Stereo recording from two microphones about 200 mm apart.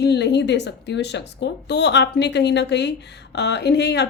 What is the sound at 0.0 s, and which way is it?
Speech, 60° left (ahead or behind).